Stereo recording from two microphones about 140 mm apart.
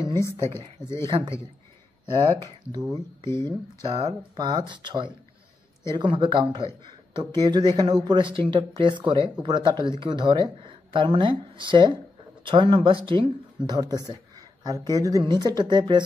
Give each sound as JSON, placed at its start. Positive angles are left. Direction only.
{"t": 0.0, "sound": "speech", "side_deg": 20}
{"t": 2.0, "sound": "speech", "side_deg": -35}
{"t": 3.3, "sound": "speech", "side_deg": 20}
{"t": 4.4, "sound": "speech", "side_deg": -30}